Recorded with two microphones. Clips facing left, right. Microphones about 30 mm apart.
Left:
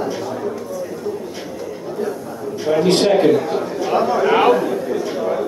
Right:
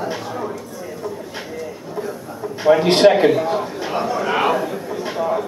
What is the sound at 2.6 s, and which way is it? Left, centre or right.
Speech, right.